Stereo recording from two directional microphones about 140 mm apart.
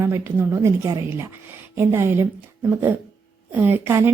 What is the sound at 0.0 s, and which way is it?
A woman's voice, 15° right (ahead or behind).